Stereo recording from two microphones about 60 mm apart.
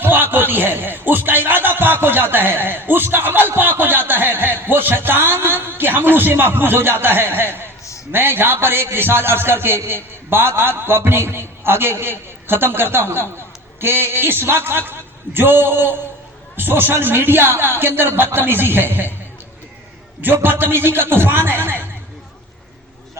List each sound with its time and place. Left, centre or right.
0.0 s a sound: right
8.1 s a man's voice: right
20.2 s a man's voice: right